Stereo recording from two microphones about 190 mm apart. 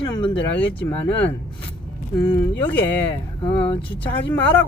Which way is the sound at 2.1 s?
20° left (ahead or behind).